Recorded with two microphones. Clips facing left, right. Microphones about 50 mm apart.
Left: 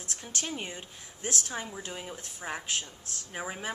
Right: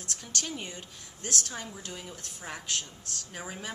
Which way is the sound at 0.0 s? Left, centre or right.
Left.